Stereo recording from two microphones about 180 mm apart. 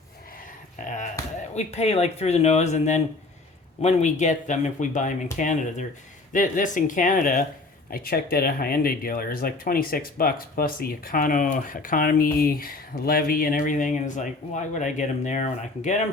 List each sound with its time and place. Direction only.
1.5 s speech: 35° left (ahead or behind)